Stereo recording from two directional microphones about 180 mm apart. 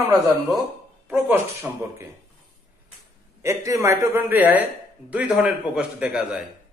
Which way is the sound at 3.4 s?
15° right (ahead or behind).